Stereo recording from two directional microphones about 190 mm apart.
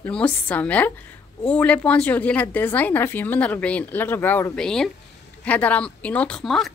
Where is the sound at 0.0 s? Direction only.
5° left (ahead or behind).